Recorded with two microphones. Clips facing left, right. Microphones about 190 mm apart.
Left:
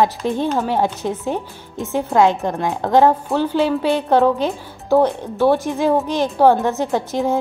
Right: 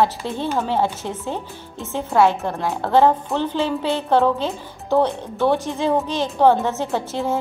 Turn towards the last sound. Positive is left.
turn(degrees=15)  # may be behind; listen again after turning